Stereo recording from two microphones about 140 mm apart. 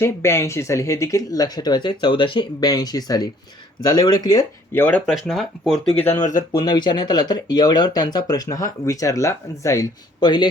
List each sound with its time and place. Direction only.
0.0 s speech: 20° left (ahead or behind)
4.7 s speech: 15° left (ahead or behind)
5.3 s speech: centre (ahead or behind)
6.5 s speech: 30° left (ahead or behind)